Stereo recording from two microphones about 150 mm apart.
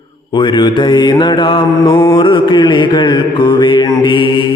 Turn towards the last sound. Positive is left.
turn(degrees=30)  # may be behind; listen again after turning